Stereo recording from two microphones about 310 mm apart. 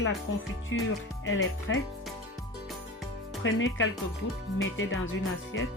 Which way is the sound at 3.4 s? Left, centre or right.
Left.